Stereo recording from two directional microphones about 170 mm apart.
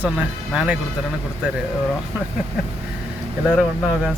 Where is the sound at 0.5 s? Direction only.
5° right (ahead or behind).